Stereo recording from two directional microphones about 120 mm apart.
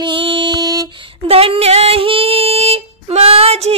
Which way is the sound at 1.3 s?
55° right (ahead or behind).